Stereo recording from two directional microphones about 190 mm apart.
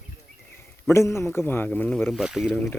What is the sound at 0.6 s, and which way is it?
A man's voice, 15° left (ahead or behind).